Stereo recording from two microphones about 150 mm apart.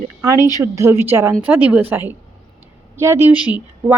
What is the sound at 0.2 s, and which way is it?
Speech, 20° right (ahead or behind).